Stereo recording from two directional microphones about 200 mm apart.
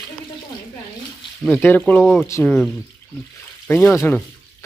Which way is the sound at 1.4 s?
10° left (ahead or behind).